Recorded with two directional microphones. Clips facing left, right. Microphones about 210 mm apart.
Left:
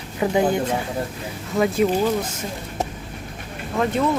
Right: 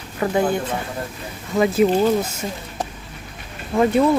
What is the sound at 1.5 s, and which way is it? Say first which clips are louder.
Speech: right 2 dB; centre (ahead or behind).